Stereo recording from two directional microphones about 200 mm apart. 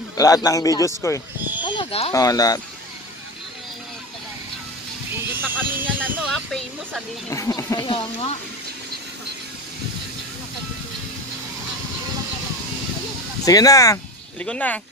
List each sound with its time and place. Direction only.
0.2 s a man's voice: 15° left (ahead or behind)
1.6 s a sound: 25° left (ahead or behind)
2.1 s a man's voice: 15° left (ahead or behind)
5.3 s speech: 10° right (ahead or behind)
6.3 s a woman's voice: 5° left (ahead or behind)
7.3 s a man's voice: 15° left (ahead or behind)
13.5 s a man's voice: 15° left (ahead or behind)
14.4 s a woman's voice: 5° left (ahead or behind)